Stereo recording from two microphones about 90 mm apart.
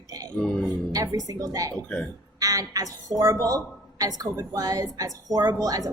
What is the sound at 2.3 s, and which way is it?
A woman's voice, 40° right (ahead or behind).